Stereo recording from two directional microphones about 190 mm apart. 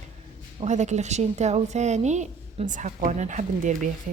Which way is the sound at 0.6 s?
35° right (ahead or behind).